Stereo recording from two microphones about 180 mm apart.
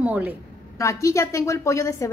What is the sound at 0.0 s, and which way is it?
Speech, 10° right (ahead or behind).